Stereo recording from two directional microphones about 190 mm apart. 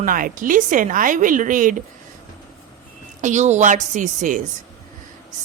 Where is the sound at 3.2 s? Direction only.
40° right (ahead or behind).